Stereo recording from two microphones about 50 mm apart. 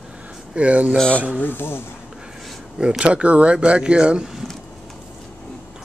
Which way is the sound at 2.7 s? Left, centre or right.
Centre.